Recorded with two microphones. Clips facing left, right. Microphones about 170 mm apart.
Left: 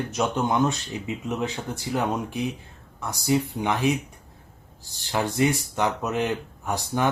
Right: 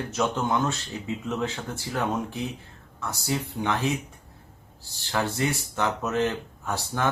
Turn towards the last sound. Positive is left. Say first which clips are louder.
# left 3 dB
turn(degrees=15)  # may be behind; listen again after turning